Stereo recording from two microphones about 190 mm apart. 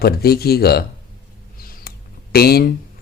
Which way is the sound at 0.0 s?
55° left (ahead or behind).